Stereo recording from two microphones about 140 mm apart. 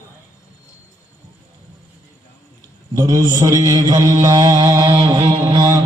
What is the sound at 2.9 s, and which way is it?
Mantra, 30° right (ahead or behind).